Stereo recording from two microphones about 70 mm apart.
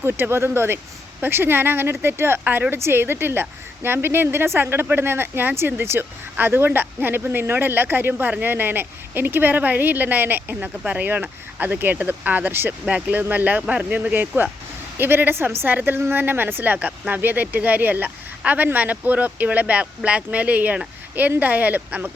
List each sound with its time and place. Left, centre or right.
0.0 s speech: right